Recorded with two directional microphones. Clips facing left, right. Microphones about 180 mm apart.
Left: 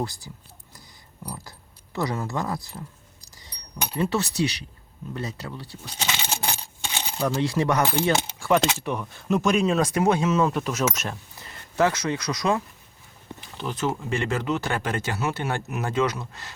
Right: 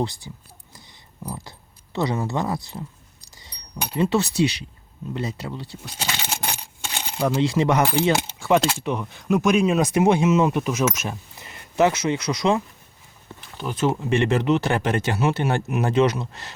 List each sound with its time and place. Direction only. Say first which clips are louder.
0.0 s speech: right 4 dB; 25° right (ahead or behind)
3.9 s speech: right 4 dB; 25° right (ahead or behind)
5.8 s speech: left 2 dB; 5° right (ahead or behind)
7.4 s speech: right 3 dB; 25° right (ahead or behind)
7.8 s speech: right 3 dB; 10° right (ahead or behind)
13.7 s speech: right 6 dB; 20° right (ahead or behind)